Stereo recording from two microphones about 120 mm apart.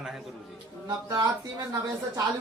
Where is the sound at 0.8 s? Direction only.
35° right (ahead or behind).